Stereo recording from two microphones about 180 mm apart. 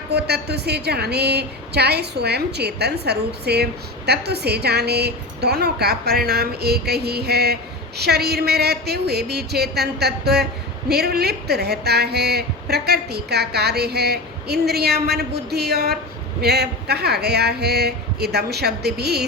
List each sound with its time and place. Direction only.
0.1 s a woman's voice: 65° right (ahead or behind)